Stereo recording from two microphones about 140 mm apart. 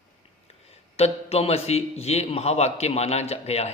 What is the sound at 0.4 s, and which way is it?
A man's voice, 45° left (ahead or behind).